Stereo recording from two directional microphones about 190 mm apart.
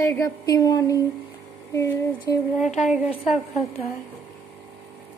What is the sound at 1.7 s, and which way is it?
Music, 15° left (ahead or behind).